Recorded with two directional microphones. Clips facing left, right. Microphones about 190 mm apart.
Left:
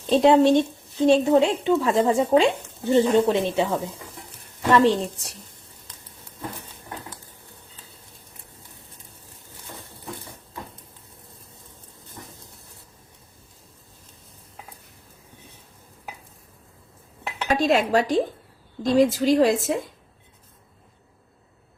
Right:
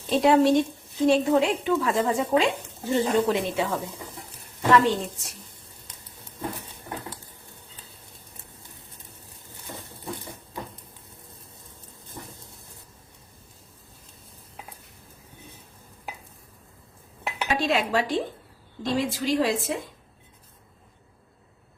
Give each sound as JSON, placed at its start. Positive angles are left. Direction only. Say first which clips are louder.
{"t": 0.1, "sound": "a woman's voice", "louder": "left 3 dB", "side_deg": 25}
{"t": 17.6, "sound": "a woman's voice", "louder": "left 5 dB", "side_deg": 45}